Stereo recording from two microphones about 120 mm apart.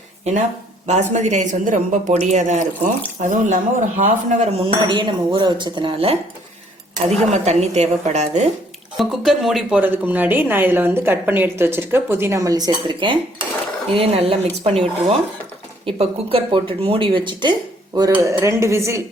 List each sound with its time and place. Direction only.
0.9 s a woman's voice: 70° right (ahead or behind)
4.5 s speech: 45° right (ahead or behind)
7.1 s speech: 70° right (ahead or behind)
9.0 s a woman's voice: centre (ahead or behind); by 13.1 s 40° right (ahead or behind)
13.9 s speech: 55° right (ahead or behind)
16.0 s speech: 50° right (ahead or behind); by 19.0 s 25° right (ahead or behind)